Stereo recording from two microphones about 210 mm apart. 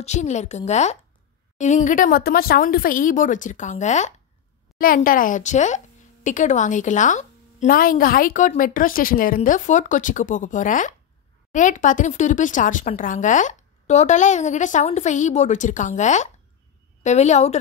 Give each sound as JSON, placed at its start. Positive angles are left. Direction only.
{"t": 0.0, "sound": "a woman's voice", "side_deg": 35}